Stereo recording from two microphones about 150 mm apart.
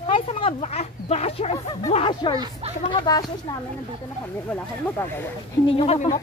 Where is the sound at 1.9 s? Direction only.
35° left (ahead or behind).